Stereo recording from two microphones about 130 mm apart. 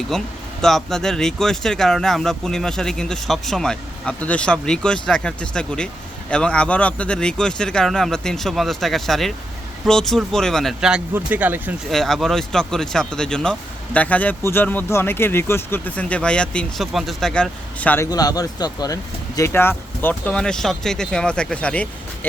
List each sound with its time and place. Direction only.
0.1 s speech: 5° left (ahead or behind); by 11.7 s 15° right (ahead or behind)
11.9 s speech: centre (ahead or behind)
18.1 s speech: 30° left (ahead or behind)
19.4 s speech: 15° left (ahead or behind)